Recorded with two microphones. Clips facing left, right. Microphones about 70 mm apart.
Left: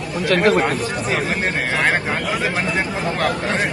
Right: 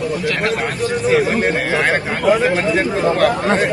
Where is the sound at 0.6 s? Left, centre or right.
Centre.